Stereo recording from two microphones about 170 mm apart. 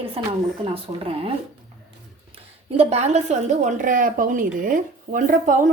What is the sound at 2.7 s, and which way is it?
A woman's voice, 40° right (ahead or behind).